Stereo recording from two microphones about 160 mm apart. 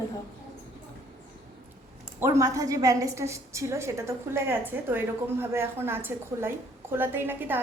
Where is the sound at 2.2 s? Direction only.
20° right (ahead or behind).